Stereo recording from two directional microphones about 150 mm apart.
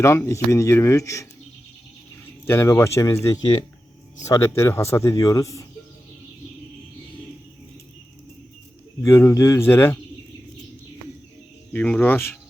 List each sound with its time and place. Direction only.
0.0 s speech: 20° left (ahead or behind)
2.5 s speech: 15° left (ahead or behind)
9.0 s speech: 20° left (ahead or behind)
11.7 s speech: 10° left (ahead or behind)